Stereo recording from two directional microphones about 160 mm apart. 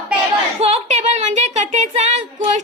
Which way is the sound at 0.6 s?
40° right (ahead or behind).